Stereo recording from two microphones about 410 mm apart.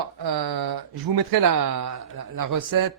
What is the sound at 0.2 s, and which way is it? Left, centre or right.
Speech, right.